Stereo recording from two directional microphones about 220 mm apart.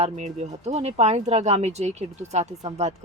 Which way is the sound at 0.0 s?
30° right (ahead or behind).